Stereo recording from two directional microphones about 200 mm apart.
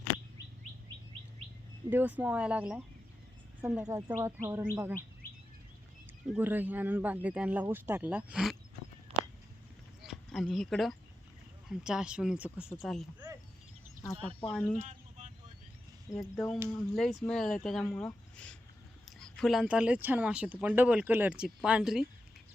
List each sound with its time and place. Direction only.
1.9 s speech: 10° right (ahead or behind)
6.3 s speech: 10° right (ahead or behind)
9.1 s a sound: 30° right (ahead or behind)
10.1 s speech: centre (ahead or behind)
14.4 s speech: 5° left (ahead or behind)
14.8 s a sound: 35° right (ahead or behind)
16.3 s speech: 5° left (ahead or behind)